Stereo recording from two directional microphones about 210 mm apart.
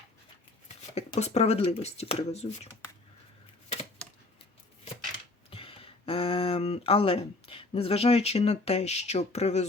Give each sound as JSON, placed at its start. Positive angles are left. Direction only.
{"t": 0.9, "sound": "speech", "side_deg": 30}
{"t": 4.0, "sound": "typewriter", "side_deg": 5}
{"t": 5.5, "sound": "speech", "side_deg": 25}